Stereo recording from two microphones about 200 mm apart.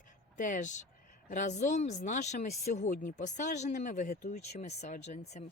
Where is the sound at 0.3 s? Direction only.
40° left (ahead or behind).